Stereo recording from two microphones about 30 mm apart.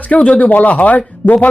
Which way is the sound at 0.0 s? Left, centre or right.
Left.